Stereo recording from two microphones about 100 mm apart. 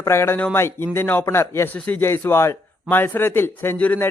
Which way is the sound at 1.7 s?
15° left (ahead or behind).